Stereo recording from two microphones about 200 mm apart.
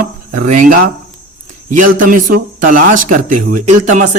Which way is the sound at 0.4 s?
40° right (ahead or behind).